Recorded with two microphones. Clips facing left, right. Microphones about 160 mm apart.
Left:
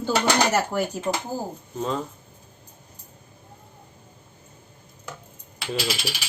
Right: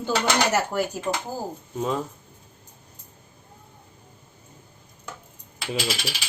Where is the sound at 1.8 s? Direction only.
5° right (ahead or behind).